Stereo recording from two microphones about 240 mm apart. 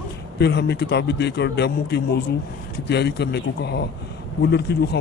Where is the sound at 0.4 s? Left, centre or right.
Left.